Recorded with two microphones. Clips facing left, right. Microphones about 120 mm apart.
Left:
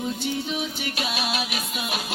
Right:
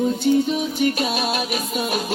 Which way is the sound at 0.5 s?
45° right (ahead or behind).